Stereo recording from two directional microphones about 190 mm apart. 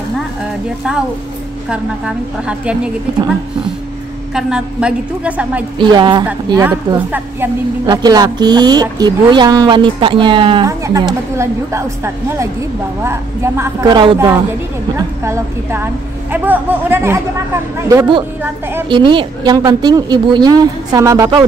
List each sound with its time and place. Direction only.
1.7 s a woman's voice: 5° right (ahead or behind)
4.3 s a woman's voice: 5° right (ahead or behind)
5.8 s a woman's voice: 25° right (ahead or behind)
18.9 s speech: 25° right (ahead or behind)